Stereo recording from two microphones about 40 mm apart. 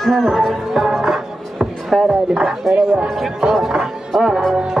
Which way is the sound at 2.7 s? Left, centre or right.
Right.